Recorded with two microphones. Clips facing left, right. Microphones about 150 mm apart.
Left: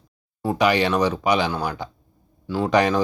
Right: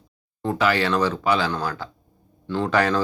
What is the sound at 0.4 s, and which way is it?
Speech, 15° left (ahead or behind).